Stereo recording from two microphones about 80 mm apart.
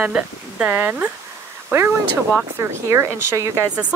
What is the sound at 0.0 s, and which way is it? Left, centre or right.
Speech, centre.